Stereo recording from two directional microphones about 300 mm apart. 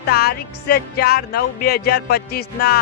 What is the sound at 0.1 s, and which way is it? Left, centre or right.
Speech, left.